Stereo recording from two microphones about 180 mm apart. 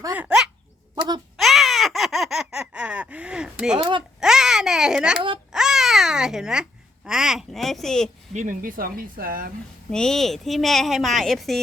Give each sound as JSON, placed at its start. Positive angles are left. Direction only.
{"t": 0.2, "sound": "speech", "side_deg": -5}
{"t": 0.9, "sound": "speech", "side_deg": -25}
{"t": 1.4, "sound": "a sound", "side_deg": 0}
{"t": 3.8, "sound": "speech", "side_deg": -25}
{"t": 4.2, "sound": "babbling", "side_deg": -5}
{"t": 8.3, "sound": "speech", "side_deg": -45}
{"t": 9.9, "sound": "a woman's voice", "side_deg": 5}